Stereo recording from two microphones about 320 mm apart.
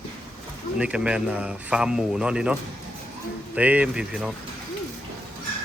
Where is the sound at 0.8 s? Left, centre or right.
Centre.